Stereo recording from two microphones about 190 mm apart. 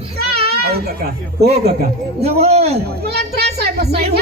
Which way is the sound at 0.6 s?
55° right (ahead or behind).